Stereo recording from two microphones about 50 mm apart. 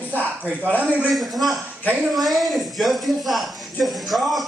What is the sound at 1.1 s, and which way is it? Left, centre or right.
A woman's voice, centre.